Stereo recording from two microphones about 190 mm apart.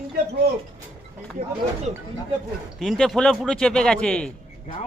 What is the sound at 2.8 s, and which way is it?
Speech, centre (ahead or behind).